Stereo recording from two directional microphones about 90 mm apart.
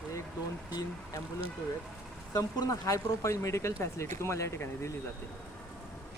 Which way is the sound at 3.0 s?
35° left (ahead or behind).